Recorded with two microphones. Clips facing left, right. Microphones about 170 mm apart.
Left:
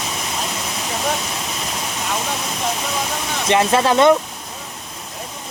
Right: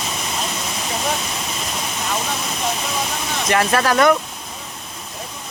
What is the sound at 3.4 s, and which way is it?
Speech, 20° left (ahead or behind).